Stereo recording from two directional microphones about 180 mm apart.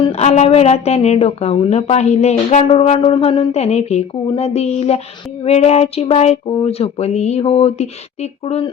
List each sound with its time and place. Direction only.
0.0 s a woman's voice: 35° left (ahead or behind)